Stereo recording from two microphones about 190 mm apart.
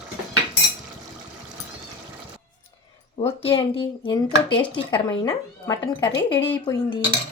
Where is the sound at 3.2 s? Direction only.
30° left (ahead or behind).